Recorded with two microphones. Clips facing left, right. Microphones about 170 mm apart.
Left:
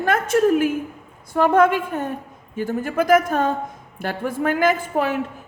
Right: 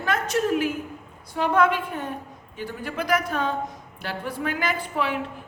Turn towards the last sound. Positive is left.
turn(degrees=45)  # may be behind; listen again after turning